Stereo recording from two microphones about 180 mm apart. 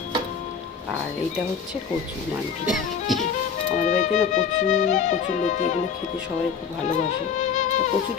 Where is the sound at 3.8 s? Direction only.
45° left (ahead or behind).